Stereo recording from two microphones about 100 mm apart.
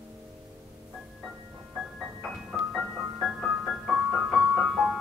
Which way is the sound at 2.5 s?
5° right (ahead or behind).